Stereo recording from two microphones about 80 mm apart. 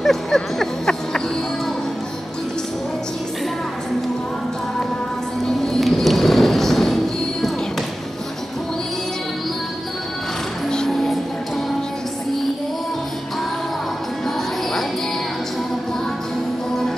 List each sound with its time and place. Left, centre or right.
0.0 s music: centre
5.6 s music: centre
10.7 s music: centre